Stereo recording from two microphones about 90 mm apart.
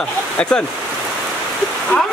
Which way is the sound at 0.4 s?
10° left (ahead or behind).